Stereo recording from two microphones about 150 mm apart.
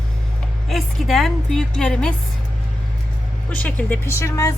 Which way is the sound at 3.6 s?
10° left (ahead or behind).